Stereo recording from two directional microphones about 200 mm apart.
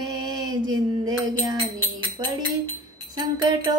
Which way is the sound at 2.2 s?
25° right (ahead or behind).